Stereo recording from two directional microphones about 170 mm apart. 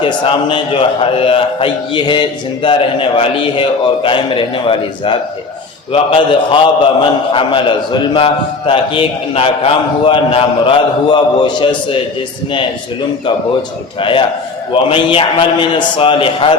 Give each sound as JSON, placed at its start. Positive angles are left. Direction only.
{"t": 0.0, "sound": "a man's voice", "side_deg": 30}
{"t": 13.2, "sound": "a man's voice", "side_deg": 30}